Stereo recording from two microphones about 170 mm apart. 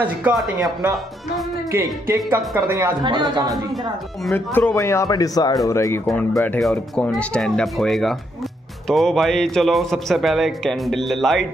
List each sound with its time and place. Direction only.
0.2 s a man's voice: 5° right (ahead or behind)
1.7 s speech: 15° right (ahead or behind)
3.0 s speech: 25° right (ahead or behind)
4.3 s a man's voice: 15° left (ahead or behind)